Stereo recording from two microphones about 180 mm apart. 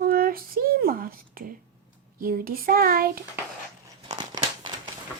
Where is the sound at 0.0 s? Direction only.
55° right (ahead or behind).